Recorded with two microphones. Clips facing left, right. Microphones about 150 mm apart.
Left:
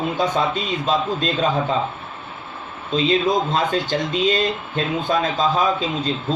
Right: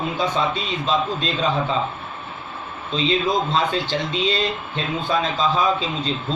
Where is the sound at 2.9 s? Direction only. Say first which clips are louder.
Left 3 dB; 45° left (ahead or behind).